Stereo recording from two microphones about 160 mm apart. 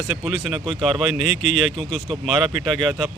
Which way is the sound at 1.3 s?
45° left (ahead or behind).